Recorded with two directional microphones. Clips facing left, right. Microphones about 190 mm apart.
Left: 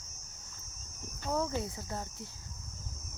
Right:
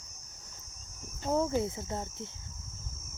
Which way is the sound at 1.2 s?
20° right (ahead or behind).